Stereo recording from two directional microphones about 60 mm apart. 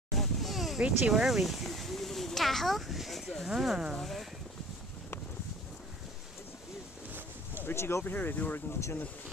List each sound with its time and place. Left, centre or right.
0.2 s a sound: centre
0.7 s speech: centre
1.1 s speech: centre
7.5 s speech: left
8.0 s speech: left